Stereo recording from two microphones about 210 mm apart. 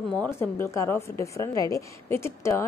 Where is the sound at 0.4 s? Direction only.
10° left (ahead or behind).